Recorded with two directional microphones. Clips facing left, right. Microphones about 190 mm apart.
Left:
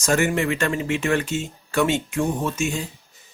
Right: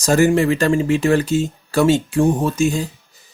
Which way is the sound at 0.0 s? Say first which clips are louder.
Right 7 dB; 35° right (ahead or behind).